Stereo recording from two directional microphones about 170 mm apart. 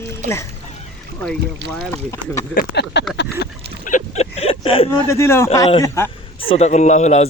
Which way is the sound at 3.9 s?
45° left (ahead or behind).